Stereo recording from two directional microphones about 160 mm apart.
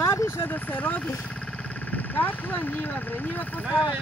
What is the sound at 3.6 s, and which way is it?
Speech, 5° right (ahead or behind).